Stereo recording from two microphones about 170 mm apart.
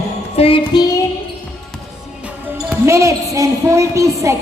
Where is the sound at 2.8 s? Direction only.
15° right (ahead or behind).